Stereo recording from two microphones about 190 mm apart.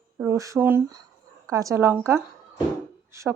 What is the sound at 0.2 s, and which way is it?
Speech, 15° right (ahead or behind).